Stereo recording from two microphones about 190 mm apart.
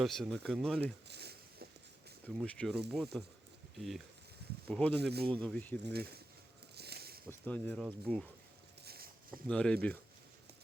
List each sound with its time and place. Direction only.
0.0 s speech: centre (ahead or behind)
1.0 s a sound: 60° right (ahead or behind)
2.2 s speech: 5° left (ahead or behind)
4.9 s speech: 60° right (ahead or behind)
5.3 s speech: 5° left (ahead or behind)
5.8 s speech: 55° right (ahead or behind)
6.7 s a sound: 60° right (ahead or behind)
7.3 s speech: 10° left (ahead or behind)
8.8 s a sound: 55° right (ahead or behind)
9.5 s speech: 5° left (ahead or behind)